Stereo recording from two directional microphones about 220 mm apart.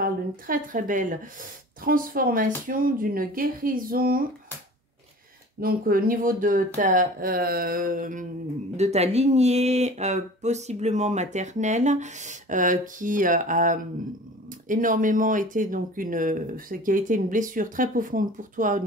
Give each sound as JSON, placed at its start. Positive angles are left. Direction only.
{"t": 0.0, "sound": "a woman's voice", "side_deg": -35}
{"t": 5.6, "sound": "speech", "side_deg": -40}